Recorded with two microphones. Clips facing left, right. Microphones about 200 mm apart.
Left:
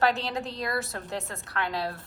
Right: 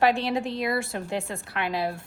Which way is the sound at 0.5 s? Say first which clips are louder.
Right 4 dB; 25° right (ahead or behind).